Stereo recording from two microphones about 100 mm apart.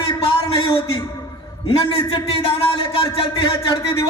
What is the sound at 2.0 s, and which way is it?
Speech, 70° left (ahead or behind).